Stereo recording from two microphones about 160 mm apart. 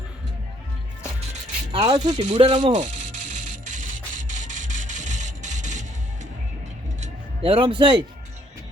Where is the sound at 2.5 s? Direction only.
50° right (ahead or behind).